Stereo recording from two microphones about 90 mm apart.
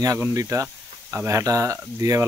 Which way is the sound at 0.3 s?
35° right (ahead or behind).